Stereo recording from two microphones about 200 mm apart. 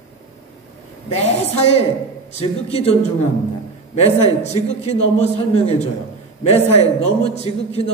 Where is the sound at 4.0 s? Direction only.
35° left (ahead or behind).